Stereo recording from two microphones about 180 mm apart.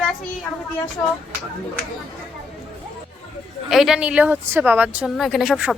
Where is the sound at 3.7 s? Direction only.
Centre (ahead or behind).